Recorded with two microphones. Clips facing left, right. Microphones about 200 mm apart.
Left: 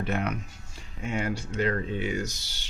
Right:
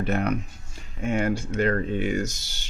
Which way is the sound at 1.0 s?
50° right (ahead or behind).